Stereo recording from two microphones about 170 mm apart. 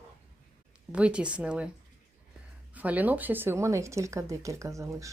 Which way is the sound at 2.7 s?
10° right (ahead or behind).